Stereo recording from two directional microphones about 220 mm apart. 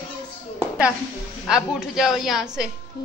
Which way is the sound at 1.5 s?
5° right (ahead or behind).